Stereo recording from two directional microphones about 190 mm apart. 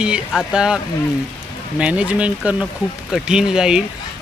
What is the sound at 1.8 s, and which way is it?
Speech, 5° right (ahead or behind).